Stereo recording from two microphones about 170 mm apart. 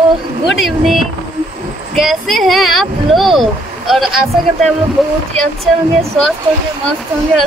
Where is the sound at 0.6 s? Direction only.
Centre (ahead or behind).